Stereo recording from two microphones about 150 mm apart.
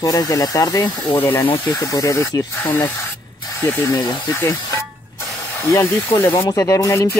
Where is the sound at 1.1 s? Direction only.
15° left (ahead or behind).